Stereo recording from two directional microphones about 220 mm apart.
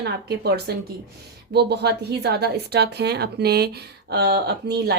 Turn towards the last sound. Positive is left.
turn(degrees=-45)  # may be behind; listen again after turning